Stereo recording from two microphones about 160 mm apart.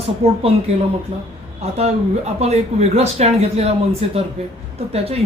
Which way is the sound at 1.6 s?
40° right (ahead or behind).